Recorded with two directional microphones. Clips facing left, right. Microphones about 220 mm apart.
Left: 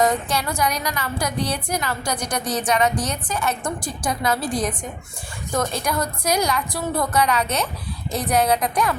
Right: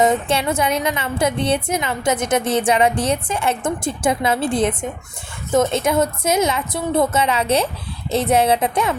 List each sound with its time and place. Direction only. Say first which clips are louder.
0.0 s a woman's voice: right 4 dB; 25° right (ahead or behind)